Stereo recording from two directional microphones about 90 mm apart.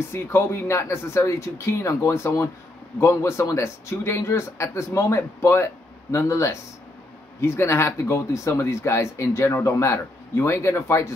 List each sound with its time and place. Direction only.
0.1 s speech: 30° left (ahead or behind)